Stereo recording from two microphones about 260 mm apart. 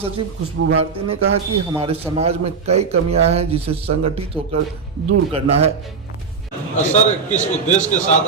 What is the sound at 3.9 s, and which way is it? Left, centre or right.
Speech, right.